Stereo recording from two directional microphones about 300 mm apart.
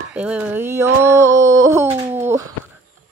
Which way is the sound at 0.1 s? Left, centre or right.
Centre.